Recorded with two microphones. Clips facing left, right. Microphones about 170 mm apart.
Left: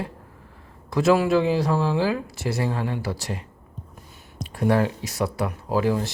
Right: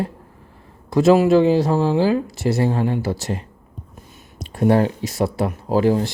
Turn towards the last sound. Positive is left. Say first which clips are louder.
# right 5 dB
turn(degrees=-30)  # may be behind; listen again after turning